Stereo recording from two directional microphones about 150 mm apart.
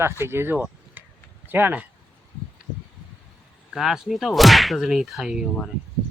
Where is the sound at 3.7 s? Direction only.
Centre (ahead or behind).